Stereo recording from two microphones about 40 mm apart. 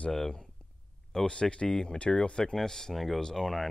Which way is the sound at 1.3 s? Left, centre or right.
Left.